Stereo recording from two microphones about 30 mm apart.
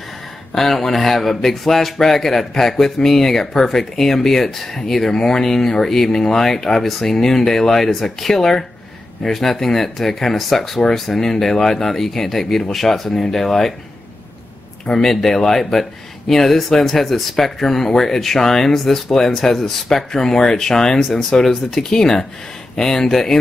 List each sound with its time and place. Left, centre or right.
0.6 s speech: centre
14.9 s speech: centre